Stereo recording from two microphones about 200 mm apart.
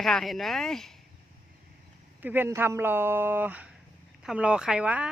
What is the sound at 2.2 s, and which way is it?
Speech, 10° right (ahead or behind).